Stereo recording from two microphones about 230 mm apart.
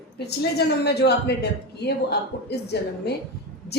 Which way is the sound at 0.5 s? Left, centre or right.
Left.